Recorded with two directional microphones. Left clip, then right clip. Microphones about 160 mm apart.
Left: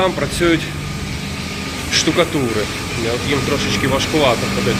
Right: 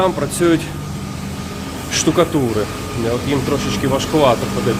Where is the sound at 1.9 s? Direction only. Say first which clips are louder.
Even; 50° right (ahead or behind).